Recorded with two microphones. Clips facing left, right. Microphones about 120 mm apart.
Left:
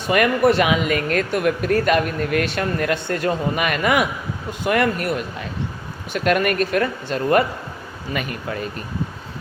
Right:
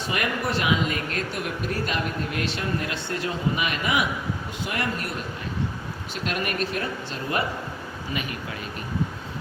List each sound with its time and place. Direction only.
0.1 s speech: 65° left (ahead or behind)